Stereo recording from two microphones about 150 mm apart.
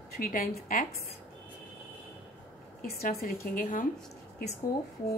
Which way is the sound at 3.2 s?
75° left (ahead or behind).